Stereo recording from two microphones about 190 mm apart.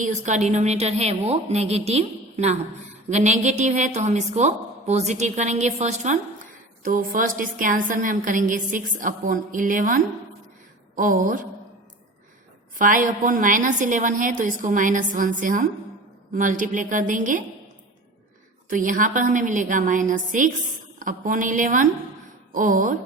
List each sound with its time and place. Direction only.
0.0 s a woman's voice: 40° right (ahead or behind)
12.8 s a woman's voice: 45° right (ahead or behind)
18.7 s a woman's voice: 45° right (ahead or behind)